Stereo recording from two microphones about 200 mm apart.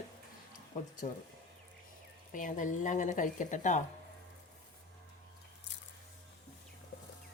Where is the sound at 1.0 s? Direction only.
40° left (ahead or behind).